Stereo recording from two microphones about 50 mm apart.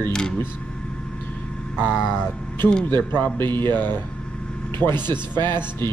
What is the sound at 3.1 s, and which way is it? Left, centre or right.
Speech, left.